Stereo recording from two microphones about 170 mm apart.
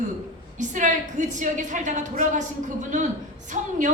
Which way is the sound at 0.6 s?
45° right (ahead or behind).